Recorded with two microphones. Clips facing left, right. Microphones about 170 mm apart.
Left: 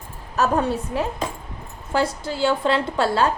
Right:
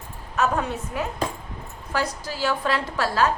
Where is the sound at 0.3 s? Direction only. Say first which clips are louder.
Left 3 dB; 35° left (ahead or behind).